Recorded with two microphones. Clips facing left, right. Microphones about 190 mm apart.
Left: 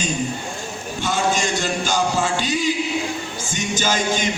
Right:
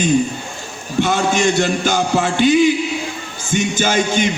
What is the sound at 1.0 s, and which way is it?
Music, 55° right (ahead or behind).